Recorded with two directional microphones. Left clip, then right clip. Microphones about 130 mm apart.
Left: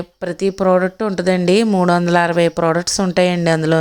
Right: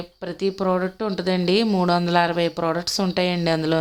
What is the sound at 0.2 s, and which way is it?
A woman's voice, 40° left (ahead or behind).